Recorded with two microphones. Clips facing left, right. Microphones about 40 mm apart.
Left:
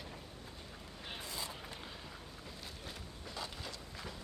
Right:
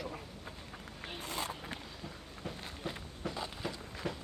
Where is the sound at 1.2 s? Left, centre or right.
Right.